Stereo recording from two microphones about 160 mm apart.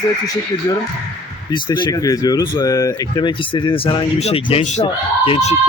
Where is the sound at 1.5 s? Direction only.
30° left (ahead or behind).